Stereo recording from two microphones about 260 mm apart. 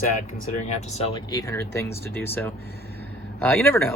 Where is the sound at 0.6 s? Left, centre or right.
Left.